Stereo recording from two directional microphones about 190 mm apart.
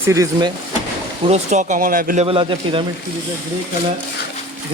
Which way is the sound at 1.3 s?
40° right (ahead or behind).